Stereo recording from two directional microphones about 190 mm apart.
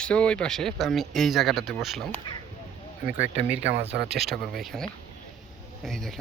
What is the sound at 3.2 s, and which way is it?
Speech, 10° right (ahead or behind).